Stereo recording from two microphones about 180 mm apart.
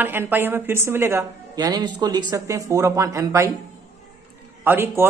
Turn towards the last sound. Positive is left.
turn(degrees=-10)  # may be behind; listen again after turning